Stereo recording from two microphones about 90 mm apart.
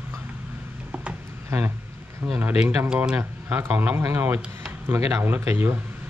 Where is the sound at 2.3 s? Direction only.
10° right (ahead or behind).